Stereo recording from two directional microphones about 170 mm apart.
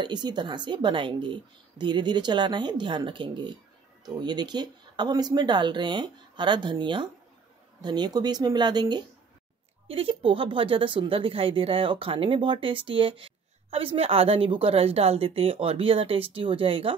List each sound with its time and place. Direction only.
0.0 s a woman's voice: 25° right (ahead or behind)